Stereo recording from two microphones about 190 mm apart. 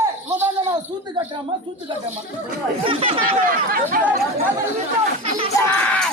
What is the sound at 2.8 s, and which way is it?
Speech, 30° right (ahead or behind).